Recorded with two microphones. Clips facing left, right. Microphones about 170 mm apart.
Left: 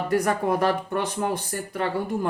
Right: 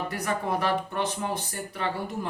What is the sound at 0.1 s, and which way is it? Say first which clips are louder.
Speech: left 10 dB; 50° left (ahead or behind).